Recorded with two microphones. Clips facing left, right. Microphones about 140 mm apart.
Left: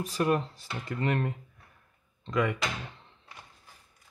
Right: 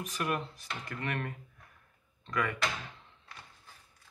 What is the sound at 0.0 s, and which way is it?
Speech, 30° left (ahead or behind).